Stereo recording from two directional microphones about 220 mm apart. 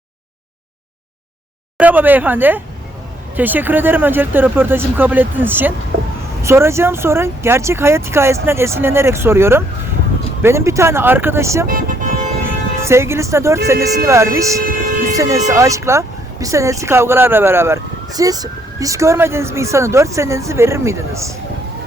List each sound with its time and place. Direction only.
1.8 s speech: 10° right (ahead or behind)
11.7 s vehicle: 40° right (ahead or behind)
12.8 s speech: 10° right (ahead or behind)